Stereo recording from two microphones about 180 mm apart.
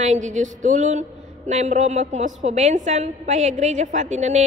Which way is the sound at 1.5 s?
40° right (ahead or behind).